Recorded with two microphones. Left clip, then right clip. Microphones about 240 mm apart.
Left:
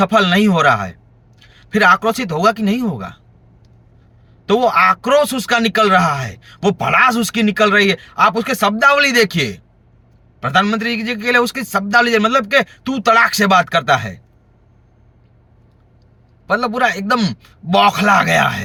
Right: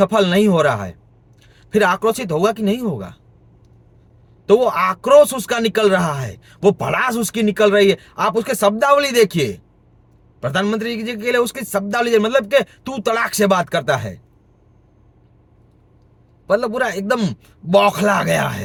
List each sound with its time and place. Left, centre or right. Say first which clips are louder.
0.0 s speech: left 1 dB; centre
4.4 s speech: left 2 dB; centre
16.5 s speech: left 2 dB; centre